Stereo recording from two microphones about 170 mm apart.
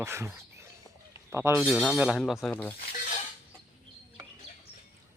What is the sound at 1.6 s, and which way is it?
Speech, 5° right (ahead or behind).